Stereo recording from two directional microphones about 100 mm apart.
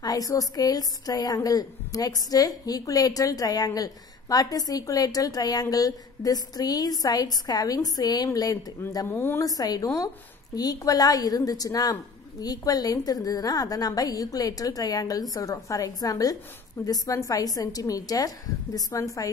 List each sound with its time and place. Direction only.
0.0 s a woman's voice: 35° left (ahead or behind)
9.0 s a woman's voice: 25° left (ahead or behind)
9.4 s a woman's voice: 40° left (ahead or behind)